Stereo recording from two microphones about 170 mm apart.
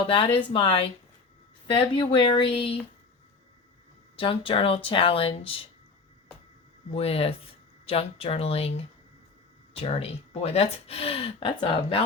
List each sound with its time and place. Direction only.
0.1 s speech: 30° left (ahead or behind)
4.2 s speech: 30° left (ahead or behind)
6.9 s speech: 35° left (ahead or behind)